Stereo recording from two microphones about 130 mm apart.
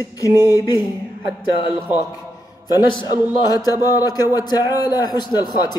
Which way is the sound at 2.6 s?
35° left (ahead or behind).